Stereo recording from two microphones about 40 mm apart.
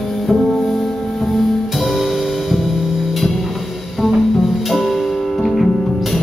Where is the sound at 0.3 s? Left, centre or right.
Centre.